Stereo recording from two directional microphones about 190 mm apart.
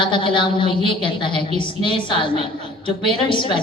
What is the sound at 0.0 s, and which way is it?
A woman's voice, 25° left (ahead or behind).